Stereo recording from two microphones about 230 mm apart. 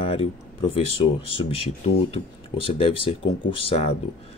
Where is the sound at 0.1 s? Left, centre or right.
Left.